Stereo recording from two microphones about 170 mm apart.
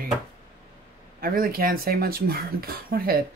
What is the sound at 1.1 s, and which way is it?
Speech, 60° right (ahead or behind).